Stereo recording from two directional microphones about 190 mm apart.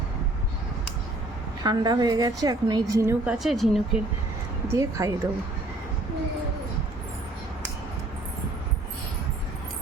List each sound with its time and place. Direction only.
1.6 s a woman's voice: 20° right (ahead or behind)
3.3 s a woman's voice: centre (ahead or behind)
4.7 s speech: 15° right (ahead or behind)